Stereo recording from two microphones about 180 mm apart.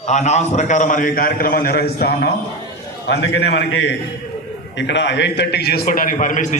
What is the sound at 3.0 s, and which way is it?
A man's voice, 80° left.